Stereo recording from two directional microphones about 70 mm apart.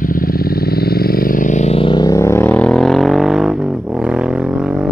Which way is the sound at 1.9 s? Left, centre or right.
Left.